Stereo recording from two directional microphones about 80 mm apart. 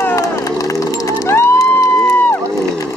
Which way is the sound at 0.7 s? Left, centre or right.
Left.